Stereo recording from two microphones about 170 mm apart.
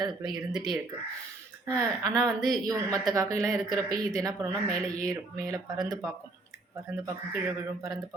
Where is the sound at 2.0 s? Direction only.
20° right (ahead or behind).